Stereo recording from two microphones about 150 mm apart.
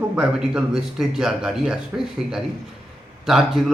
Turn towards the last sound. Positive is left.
turn(degrees=0)  # may be behind; listen again after turning